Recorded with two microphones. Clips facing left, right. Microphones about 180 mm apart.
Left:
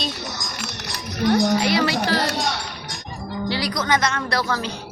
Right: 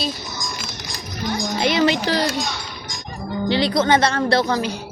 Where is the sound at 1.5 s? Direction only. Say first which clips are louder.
Right 2 dB; 20° right (ahead or behind).